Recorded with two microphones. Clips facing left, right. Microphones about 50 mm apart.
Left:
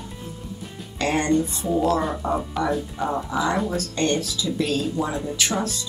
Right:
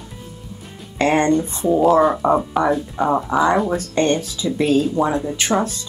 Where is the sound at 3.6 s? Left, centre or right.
Right.